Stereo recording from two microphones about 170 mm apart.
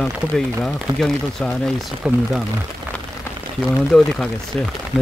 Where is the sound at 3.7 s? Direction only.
5° left (ahead or behind).